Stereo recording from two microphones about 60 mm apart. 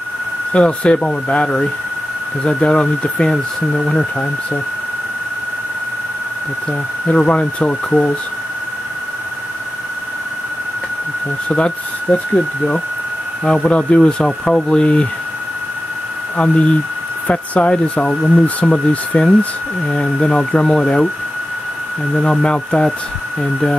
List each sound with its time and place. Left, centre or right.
0.5 s speech: centre
6.7 s speech: centre
11.4 s speech: centre
13.5 s speech: centre
16.3 s speech: centre
22.2 s speech: centre